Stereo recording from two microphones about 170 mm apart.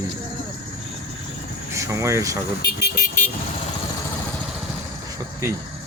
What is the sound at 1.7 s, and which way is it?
Speech, 15° right (ahead or behind).